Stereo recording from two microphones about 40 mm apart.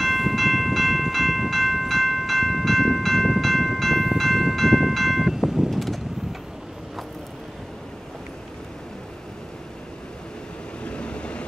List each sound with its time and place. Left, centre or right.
0.0 s train: centre
4.9 s a sound: centre
5.7 s vehicle: centre
10.8 s vehicle: left